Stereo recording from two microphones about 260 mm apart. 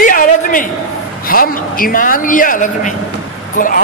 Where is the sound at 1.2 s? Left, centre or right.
Left.